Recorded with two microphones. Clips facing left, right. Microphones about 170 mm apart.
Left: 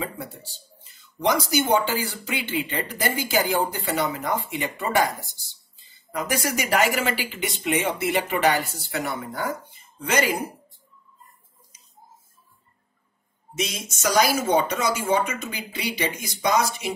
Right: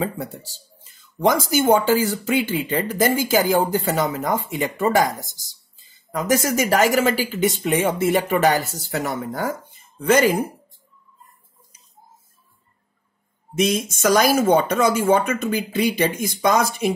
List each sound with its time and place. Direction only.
0.2 s speech: 40° right (ahead or behind)
13.6 s speech: 55° right (ahead or behind)